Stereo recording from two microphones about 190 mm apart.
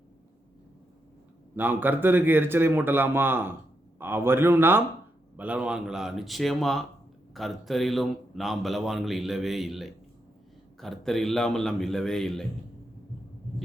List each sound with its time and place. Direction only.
1.5 s a man's voice: 10° right (ahead or behind)